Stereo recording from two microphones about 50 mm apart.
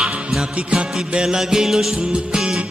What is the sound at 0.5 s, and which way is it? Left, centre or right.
Music, right.